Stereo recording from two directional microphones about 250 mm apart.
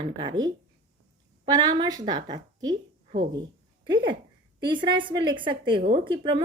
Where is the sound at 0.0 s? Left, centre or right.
Centre.